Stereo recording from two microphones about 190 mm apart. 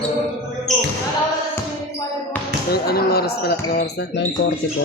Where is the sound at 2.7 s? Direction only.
55° left (ahead or behind).